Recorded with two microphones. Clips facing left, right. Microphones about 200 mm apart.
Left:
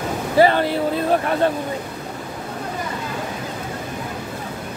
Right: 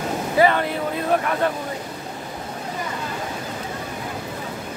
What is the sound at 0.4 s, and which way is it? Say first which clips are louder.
Speech: left 3 dB; 30° left (ahead or behind).